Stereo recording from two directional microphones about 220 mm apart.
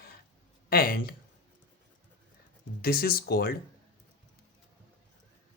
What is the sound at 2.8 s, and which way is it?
Speech, 45° left (ahead or behind).